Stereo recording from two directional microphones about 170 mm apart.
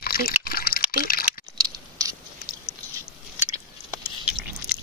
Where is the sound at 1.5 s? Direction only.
20° right (ahead or behind).